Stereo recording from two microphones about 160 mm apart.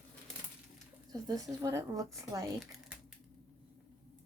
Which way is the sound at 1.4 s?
20° right (ahead or behind).